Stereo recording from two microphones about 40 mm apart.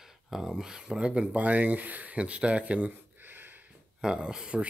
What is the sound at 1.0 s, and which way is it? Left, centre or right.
Speech, right.